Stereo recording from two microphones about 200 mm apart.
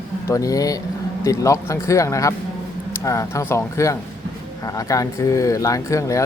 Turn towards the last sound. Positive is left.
turn(degrees=15)  # may be behind; listen again after turning